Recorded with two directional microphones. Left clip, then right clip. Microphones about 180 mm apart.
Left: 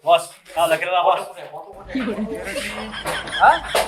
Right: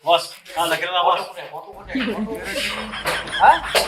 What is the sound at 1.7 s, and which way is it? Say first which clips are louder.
Speech: right 1 dB; centre (ahead or behind).